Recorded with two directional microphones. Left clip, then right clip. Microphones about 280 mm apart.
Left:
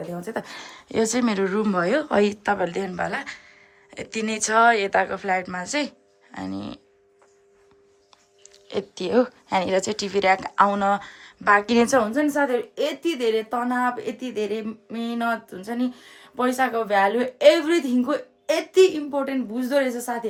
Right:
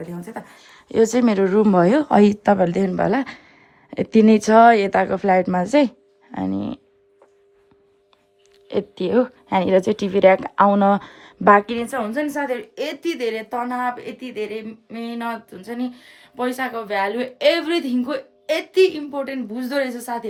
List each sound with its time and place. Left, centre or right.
0.4 s a woman's voice: centre
0.7 s a woman's voice: centre
8.6 s a woman's voice: centre
11.8 s a woman's voice: left
12.3 s a woman's voice: centre